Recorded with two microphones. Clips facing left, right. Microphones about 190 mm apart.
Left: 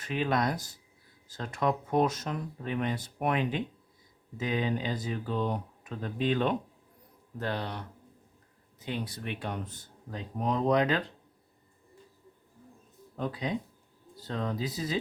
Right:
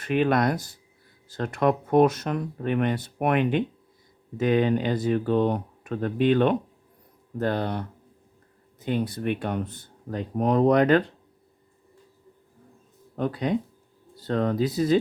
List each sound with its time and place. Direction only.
0.0 s speech: 65° right (ahead or behind)
7.3 s speech: 50° right (ahead or behind)
13.1 s speech: 60° right (ahead or behind)